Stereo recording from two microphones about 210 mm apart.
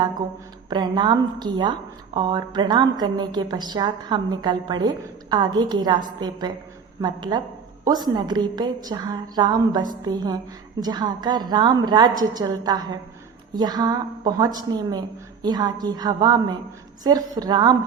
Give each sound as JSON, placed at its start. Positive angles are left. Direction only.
{"t": 0.7, "sound": "a woman's voice", "side_deg": -20}